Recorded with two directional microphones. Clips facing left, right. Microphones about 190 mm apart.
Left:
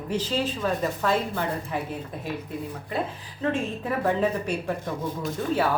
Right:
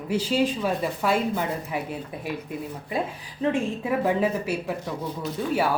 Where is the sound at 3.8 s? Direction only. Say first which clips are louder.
Even; 10° right (ahead or behind).